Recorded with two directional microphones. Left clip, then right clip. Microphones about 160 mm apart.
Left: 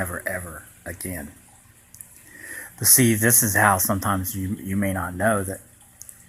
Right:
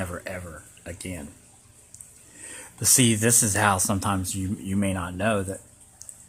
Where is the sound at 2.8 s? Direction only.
30° right (ahead or behind).